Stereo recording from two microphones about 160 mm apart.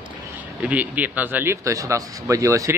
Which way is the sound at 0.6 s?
10° right (ahead or behind).